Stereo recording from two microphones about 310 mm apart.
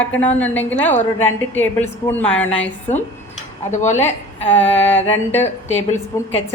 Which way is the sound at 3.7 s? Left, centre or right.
Left.